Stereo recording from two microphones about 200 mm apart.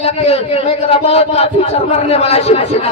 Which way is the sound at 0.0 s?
30° left (ahead or behind).